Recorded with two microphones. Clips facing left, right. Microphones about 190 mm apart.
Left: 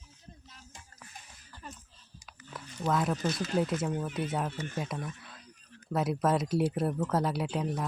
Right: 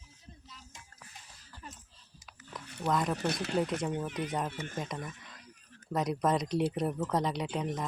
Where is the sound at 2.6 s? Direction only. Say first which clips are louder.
Left 2 dB; 65° right (ahead or behind).